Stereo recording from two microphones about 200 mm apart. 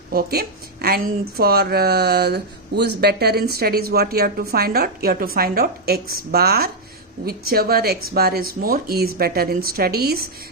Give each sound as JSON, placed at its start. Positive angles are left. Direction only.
{"t": 0.1, "sound": "speech", "side_deg": -50}